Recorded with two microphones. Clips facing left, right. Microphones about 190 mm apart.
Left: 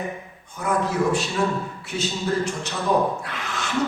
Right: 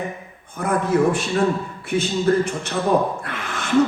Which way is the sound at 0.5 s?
55° right (ahead or behind).